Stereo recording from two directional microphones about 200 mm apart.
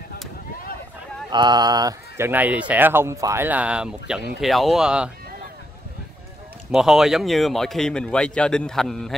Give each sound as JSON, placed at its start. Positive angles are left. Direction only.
{"t": 1.3, "sound": "a man's voice", "side_deg": -20}
{"t": 6.7, "sound": "a man's voice", "side_deg": 0}